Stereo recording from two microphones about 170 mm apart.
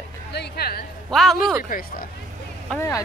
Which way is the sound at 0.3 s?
70° left (ahead or behind).